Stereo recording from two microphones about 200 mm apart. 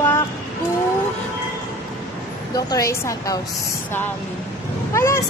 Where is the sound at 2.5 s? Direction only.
15° left (ahead or behind).